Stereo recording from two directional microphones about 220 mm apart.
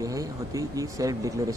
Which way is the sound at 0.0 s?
15° right (ahead or behind).